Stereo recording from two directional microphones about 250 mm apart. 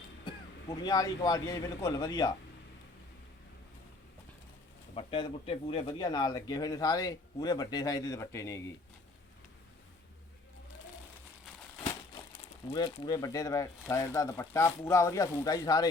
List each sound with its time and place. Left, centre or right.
0.3 s speech: centre
4.9 s speech: left
11.8 s speech: centre